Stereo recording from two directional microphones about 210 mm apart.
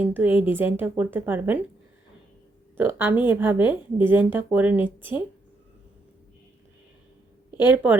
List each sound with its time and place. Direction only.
0.0 s speech: 10° right (ahead or behind)
2.7 s speech: 10° right (ahead or behind)
4.9 s speech: 25° left (ahead or behind)
7.5 s a woman's voice: 10° right (ahead or behind)